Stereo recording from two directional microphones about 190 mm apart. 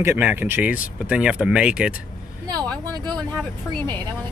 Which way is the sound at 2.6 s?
5° left (ahead or behind).